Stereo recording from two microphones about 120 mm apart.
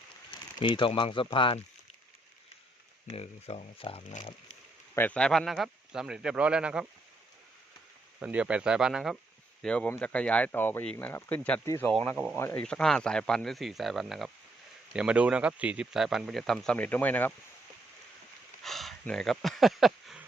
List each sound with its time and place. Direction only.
0.6 s speech: 45° left (ahead or behind)
3.1 s speech: 60° left (ahead or behind)
4.9 s speech: 10° left (ahead or behind); by 6.8 s 10° right (ahead or behind)
8.2 s speech: 10° right (ahead or behind)
9.6 s speech: 10° left (ahead or behind)
11.6 s speech: 25° left (ahead or behind)
12.1 s speech: 10° right (ahead or behind)
12.4 s speech: 20° left (ahead or behind)
12.6 s speech: 5° left (ahead or behind)
18.6 s a sound: centre (ahead or behind)